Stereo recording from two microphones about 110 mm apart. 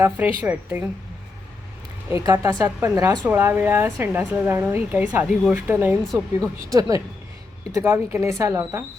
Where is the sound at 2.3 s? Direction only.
30° right (ahead or behind).